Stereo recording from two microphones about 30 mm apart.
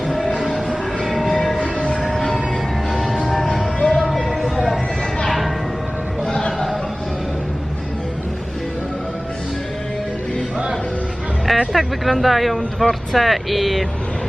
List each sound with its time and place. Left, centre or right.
0.7 s train: centre
1.5 s train: left
2.1 s music: centre
11.4 s speech: centre